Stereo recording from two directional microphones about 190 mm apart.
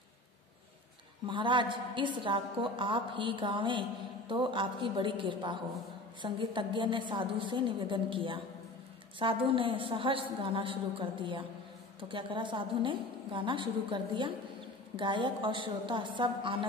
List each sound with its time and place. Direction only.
1.2 s a woman's voice: 25° right (ahead or behind)